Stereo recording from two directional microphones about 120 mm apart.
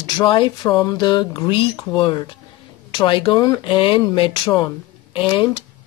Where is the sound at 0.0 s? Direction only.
45° left (ahead or behind).